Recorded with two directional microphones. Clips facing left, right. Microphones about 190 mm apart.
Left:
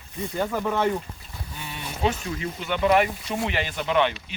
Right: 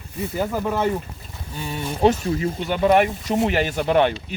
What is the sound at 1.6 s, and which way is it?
Speech, 40° right (ahead or behind).